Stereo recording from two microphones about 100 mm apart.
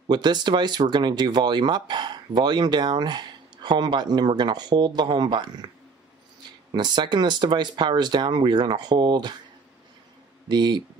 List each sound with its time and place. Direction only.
0.1 s speech: 45° right (ahead or behind)
6.7 s speech: 45° right (ahead or behind)
10.5 s speech: 45° right (ahead or behind)